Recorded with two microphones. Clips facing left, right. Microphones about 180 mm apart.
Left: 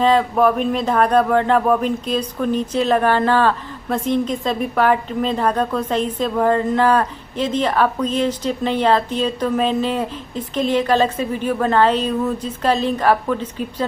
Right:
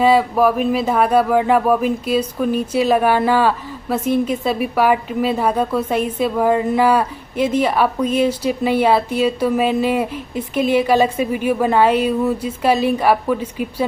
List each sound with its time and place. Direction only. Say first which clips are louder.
0.0 s speech: right 1 dB; 10° right (ahead or behind)